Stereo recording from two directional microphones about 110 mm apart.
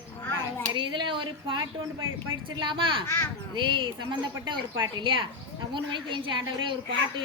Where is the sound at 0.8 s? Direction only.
45° right (ahead or behind).